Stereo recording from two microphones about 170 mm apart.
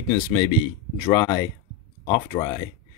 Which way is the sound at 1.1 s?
20° left (ahead or behind).